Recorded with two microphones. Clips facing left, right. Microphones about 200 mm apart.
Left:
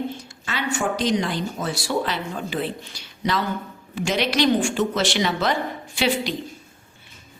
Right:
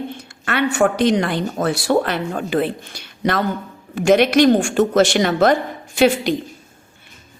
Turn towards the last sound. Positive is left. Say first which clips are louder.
# right 8 dB
turn(degrees=-50)  # may be behind; listen again after turning